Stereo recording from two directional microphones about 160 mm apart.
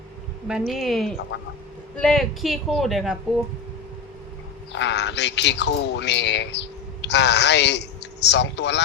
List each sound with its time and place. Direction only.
0.4 s speech: 5° right (ahead or behind)
1.3 s speech: 90° left
2.0 s speech: centre (ahead or behind)
4.7 s speech: 90° left